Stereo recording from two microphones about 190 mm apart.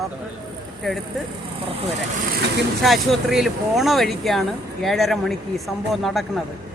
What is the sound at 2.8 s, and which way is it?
Speech, centre (ahead or behind).